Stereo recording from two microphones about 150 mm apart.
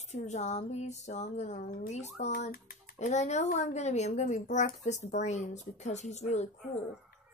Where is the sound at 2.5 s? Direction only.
90° left.